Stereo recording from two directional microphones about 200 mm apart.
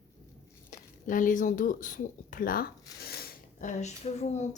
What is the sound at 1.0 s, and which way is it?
Speech, 40° left (ahead or behind).